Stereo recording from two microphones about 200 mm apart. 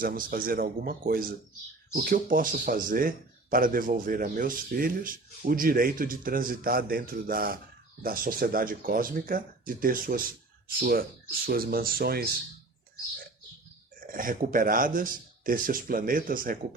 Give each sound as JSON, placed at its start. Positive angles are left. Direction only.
{"t": 0.0, "sound": "speech", "side_deg": -45}
{"t": 14.0, "sound": "speech", "side_deg": -45}